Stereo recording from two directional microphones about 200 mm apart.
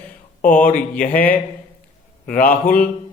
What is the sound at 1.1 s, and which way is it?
Speech, 10° left (ahead or behind).